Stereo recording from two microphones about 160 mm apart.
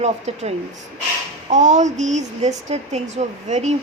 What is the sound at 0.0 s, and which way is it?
A woman's voice, 40° right (ahead or behind).